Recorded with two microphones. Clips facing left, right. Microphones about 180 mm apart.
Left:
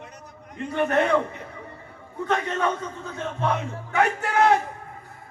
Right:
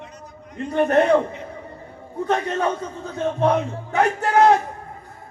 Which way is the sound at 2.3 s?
35° right (ahead or behind).